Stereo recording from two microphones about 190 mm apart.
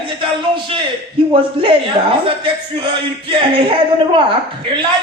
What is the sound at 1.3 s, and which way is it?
A woman's voice, 30° right (ahead or behind).